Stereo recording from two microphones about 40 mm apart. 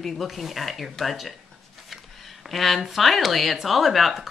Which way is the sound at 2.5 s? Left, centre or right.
Centre.